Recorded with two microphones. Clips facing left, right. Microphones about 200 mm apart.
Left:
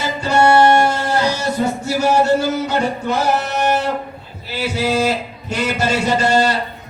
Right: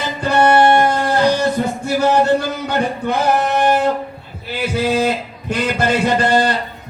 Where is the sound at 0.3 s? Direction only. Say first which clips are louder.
Even; 10° left (ahead or behind).